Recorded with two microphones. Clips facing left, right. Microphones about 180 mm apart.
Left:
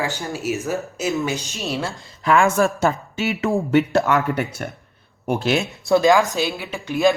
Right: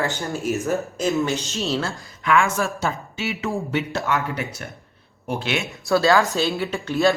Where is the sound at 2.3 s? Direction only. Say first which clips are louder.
Left 4 dB; 45° left (ahead or behind).